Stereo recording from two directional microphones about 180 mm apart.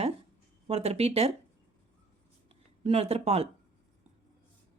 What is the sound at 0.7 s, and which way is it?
Speech, 35° right (ahead or behind).